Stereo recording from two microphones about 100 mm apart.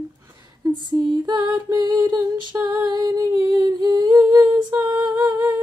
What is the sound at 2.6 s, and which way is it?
Humming, 40° right (ahead or behind).